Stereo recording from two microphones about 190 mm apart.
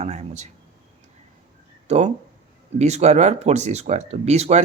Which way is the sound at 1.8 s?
35° right (ahead or behind).